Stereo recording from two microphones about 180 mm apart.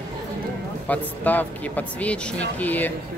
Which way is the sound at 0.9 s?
10° left (ahead or behind).